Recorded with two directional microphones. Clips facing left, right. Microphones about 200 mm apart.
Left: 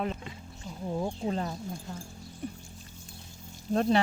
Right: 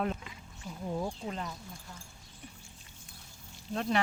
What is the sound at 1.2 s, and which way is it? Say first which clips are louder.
Speech: left 7 dB; 35° left (ahead or behind).